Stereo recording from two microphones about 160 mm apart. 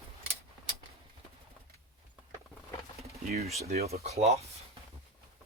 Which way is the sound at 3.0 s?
40° right (ahead or behind).